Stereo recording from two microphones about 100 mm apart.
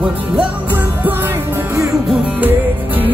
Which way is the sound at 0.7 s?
20° right (ahead or behind).